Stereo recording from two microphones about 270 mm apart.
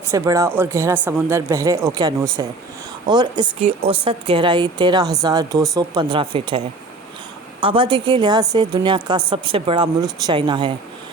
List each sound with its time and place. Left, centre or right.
0.1 s a woman's voice: centre
7.6 s a woman's voice: centre